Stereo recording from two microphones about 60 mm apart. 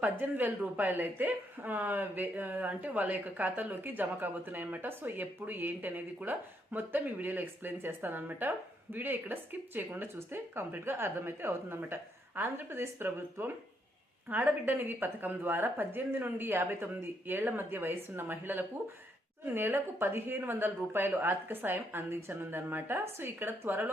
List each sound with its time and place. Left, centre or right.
0.0 s speech: right